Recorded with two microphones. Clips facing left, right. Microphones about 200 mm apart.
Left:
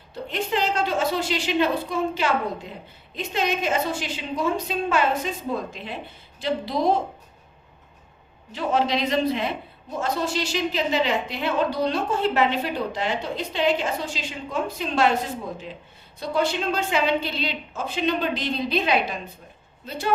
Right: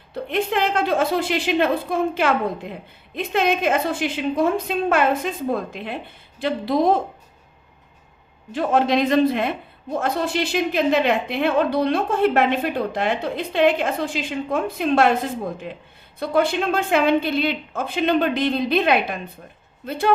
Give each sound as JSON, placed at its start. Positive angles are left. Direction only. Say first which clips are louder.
{"t": 0.1, "sound": "a woman's voice", "louder": "right 4 dB", "side_deg": -55}
{"t": 8.5, "sound": "a woman's voice", "louder": "right 4 dB", "side_deg": -50}